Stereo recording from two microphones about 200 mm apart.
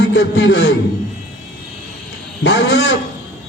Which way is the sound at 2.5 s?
60° left (ahead or behind).